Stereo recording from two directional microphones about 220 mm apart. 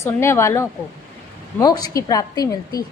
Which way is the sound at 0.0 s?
10° left (ahead or behind).